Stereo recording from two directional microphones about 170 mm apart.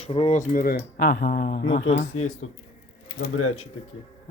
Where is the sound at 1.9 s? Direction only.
40° left (ahead or behind).